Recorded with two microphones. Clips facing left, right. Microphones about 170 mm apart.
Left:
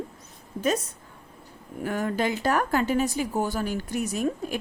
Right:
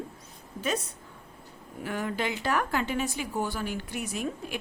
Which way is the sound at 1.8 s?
45° left (ahead or behind).